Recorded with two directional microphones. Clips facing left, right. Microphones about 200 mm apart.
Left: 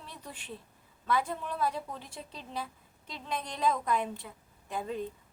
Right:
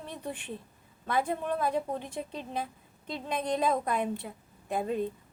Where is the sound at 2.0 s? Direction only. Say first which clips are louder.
Right 8 dB; 15° right (ahead or behind).